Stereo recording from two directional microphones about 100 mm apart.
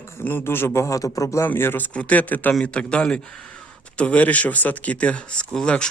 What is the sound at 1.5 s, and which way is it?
Speech, 20° left (ahead or behind).